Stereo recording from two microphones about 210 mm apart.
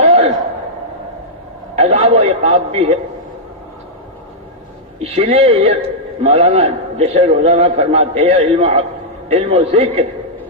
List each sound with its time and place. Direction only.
0.0 s a sound: 30° right (ahead or behind)
1.7 s a man's voice: 30° right (ahead or behind)
4.9 s a man's voice: 30° right (ahead or behind)